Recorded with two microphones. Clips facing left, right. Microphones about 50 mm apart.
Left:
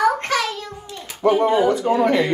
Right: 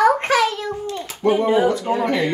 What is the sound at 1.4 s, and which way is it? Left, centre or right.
Speech, centre.